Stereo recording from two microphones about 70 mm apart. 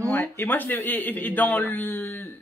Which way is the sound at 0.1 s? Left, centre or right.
Left.